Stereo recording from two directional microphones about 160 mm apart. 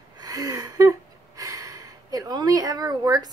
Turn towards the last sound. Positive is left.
turn(degrees=-25)  # may be behind; listen again after turning